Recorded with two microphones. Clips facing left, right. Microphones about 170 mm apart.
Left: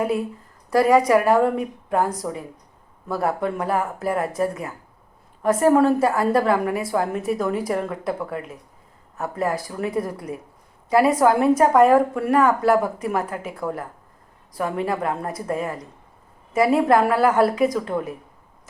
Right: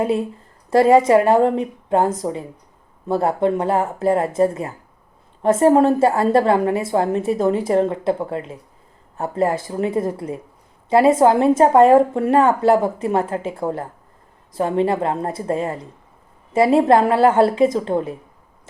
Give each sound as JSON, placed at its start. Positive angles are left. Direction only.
{"t": 0.0, "sound": "a woman's voice", "side_deg": -25}